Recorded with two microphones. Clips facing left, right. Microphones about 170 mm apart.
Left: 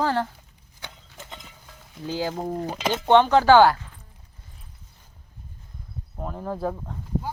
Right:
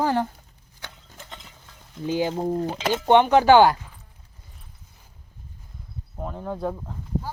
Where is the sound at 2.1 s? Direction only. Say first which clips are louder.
Right 4 dB; 20° right (ahead or behind).